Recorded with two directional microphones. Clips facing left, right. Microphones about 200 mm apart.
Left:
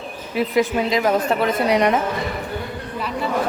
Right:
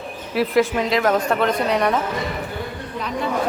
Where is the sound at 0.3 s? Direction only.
Centre (ahead or behind).